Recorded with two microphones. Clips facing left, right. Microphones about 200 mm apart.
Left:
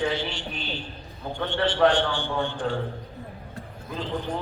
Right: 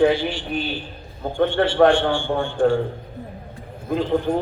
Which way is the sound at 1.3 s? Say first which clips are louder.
Right 8 dB; 45° right (ahead or behind).